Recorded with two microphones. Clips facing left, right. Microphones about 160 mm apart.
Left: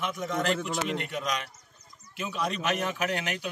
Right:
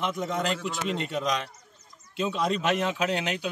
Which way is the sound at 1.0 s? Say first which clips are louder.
Right 4 dB; 25° right (ahead or behind).